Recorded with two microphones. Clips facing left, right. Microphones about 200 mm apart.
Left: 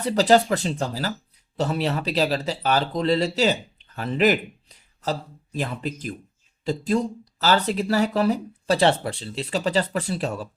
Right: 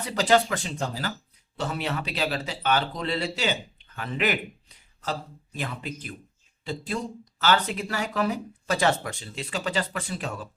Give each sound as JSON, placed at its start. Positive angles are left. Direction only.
{"t": 0.0, "sound": "speech", "side_deg": 35}
{"t": 5.5, "sound": "speech", "side_deg": 40}